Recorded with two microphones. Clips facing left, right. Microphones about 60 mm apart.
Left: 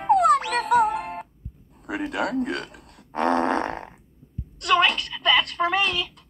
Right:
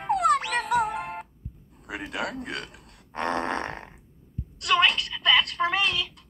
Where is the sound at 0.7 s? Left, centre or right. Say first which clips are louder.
Left 6 dB; left.